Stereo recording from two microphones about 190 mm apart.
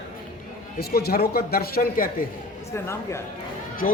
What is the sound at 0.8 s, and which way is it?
A man's voice, 55° left (ahead or behind).